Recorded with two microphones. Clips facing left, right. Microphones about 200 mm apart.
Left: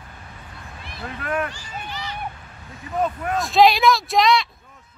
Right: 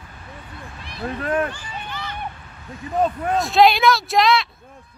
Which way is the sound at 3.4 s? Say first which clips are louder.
Even; centre (ahead or behind).